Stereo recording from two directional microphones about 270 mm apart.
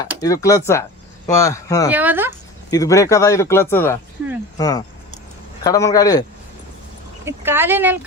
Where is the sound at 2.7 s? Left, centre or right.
Centre.